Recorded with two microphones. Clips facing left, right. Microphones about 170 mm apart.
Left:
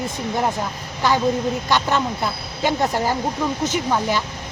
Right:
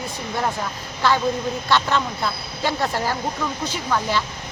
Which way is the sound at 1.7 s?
15° left (ahead or behind).